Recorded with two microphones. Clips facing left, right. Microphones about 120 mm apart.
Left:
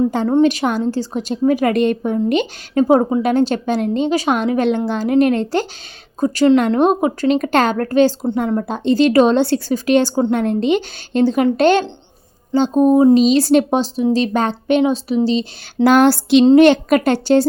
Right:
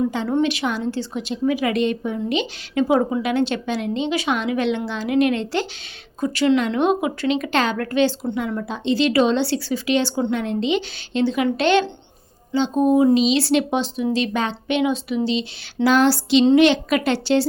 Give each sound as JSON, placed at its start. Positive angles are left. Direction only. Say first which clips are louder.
{"t": 0.1, "sound": "speech", "louder": "left 6 dB", "side_deg": 45}